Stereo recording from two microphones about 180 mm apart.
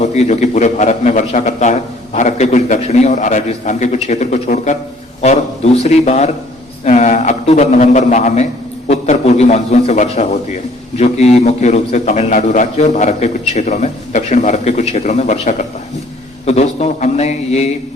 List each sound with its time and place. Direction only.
0.0 s a man's voice: 40° left (ahead or behind)